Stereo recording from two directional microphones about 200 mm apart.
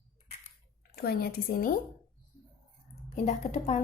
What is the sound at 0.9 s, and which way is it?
Speech, 50° left (ahead or behind).